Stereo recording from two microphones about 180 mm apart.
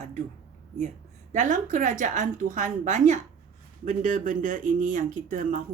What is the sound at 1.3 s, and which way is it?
Speech, 45° right (ahead or behind).